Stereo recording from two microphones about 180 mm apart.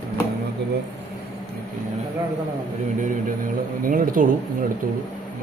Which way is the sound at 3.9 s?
50° right (ahead or behind).